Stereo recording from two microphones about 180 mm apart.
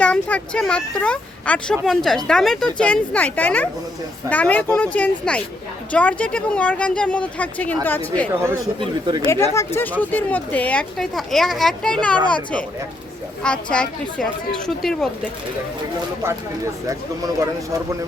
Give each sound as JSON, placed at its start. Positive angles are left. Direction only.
{"t": 0.0, "sound": "speech", "side_deg": 5}
{"t": 8.8, "sound": "speech", "side_deg": -25}
{"t": 9.2, "sound": "speech", "side_deg": 15}